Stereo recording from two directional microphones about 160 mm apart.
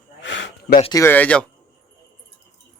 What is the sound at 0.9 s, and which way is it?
Speech, 20° left (ahead or behind).